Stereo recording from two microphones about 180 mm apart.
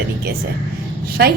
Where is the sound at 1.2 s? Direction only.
60° right (ahead or behind).